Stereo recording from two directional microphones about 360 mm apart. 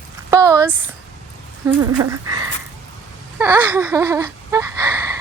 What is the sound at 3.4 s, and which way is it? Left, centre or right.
Speech, centre.